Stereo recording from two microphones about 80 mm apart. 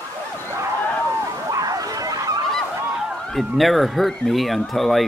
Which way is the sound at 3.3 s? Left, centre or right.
Centre.